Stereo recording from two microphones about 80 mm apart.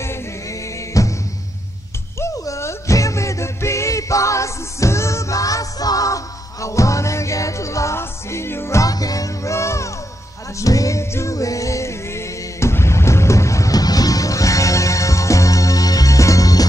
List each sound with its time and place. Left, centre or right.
0.0 s music: left
2.1 s music: left